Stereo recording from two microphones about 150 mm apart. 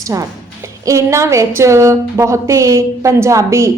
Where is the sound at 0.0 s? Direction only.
20° right (ahead or behind).